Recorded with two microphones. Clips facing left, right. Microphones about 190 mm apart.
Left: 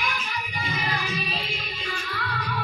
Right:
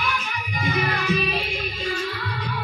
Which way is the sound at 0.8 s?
60° right (ahead or behind).